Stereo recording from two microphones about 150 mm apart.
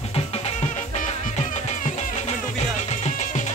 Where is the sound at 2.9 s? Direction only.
50° left (ahead or behind).